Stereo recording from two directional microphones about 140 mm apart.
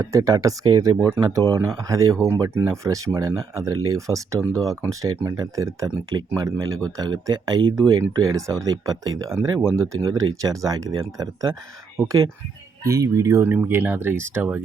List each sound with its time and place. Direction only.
0.0 s speech: 25° right (ahead or behind)